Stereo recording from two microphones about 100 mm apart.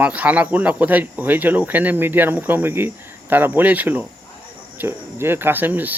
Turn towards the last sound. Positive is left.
turn(degrees=-20)  # may be behind; listen again after turning